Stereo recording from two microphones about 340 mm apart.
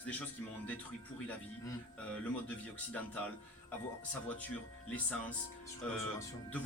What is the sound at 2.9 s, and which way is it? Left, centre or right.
Speech, centre.